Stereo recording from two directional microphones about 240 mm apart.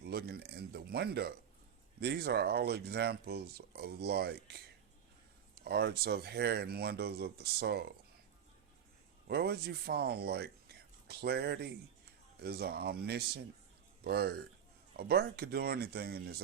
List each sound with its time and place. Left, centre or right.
0.0 s speech: right
9.2 s speech: right